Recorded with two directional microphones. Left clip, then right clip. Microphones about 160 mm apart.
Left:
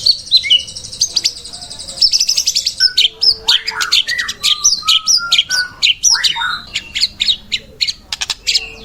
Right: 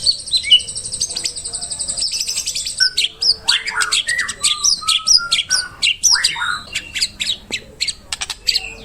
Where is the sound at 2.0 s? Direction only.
20° right (ahead or behind).